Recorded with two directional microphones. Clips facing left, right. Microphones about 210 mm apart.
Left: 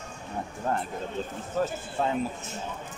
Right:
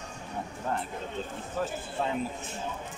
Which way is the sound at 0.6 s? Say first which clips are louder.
Left 3 dB; 50° left (ahead or behind).